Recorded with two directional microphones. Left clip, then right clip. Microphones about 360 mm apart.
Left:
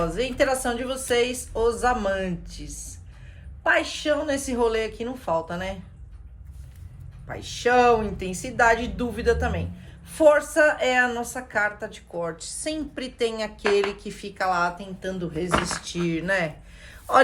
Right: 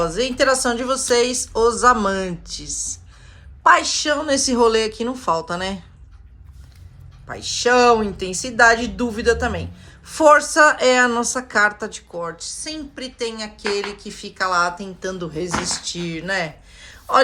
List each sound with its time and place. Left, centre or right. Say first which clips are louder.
0.0 s a woman's voice: right 5 dB; centre
7.3 s a woman's voice: right 5 dB; centre